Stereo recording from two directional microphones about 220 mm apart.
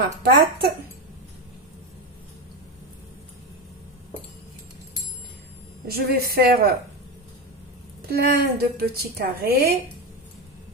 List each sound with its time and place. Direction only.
0.2 s a woman's voice: 45° right (ahead or behind)
5.9 s a woman's voice: 45° right (ahead or behind)
8.1 s a woman's voice: 45° right (ahead or behind)